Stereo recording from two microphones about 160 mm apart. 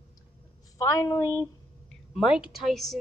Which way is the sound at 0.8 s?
20° left (ahead or behind).